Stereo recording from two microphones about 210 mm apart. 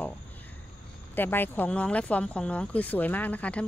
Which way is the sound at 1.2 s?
10° left (ahead or behind).